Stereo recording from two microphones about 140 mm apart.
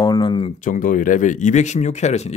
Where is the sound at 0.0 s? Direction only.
30° left (ahead or behind).